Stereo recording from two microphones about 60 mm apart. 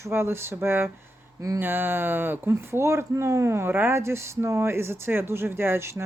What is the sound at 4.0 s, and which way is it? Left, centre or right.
Speech, right.